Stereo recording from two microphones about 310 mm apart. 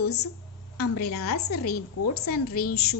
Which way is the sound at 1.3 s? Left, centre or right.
Left.